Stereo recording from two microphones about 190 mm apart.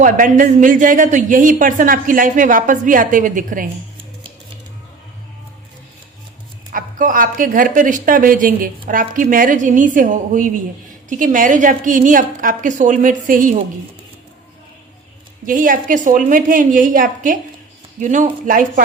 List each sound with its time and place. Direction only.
0.0 s speech: 45° right (ahead or behind)
6.7 s speech: 45° right (ahead or behind)
15.4 s speech: 45° right (ahead or behind)